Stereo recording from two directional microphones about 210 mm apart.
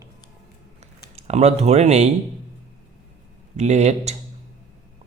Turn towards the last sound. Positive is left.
turn(degrees=-30)  # may be behind; listen again after turning